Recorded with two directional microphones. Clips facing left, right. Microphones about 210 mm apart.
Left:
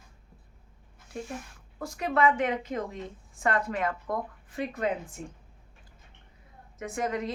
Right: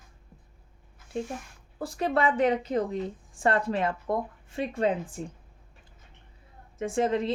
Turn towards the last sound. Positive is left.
turn(degrees=-30)  # may be behind; listen again after turning